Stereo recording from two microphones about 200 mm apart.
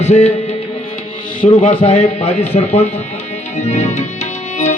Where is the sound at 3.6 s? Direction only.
35° left (ahead or behind).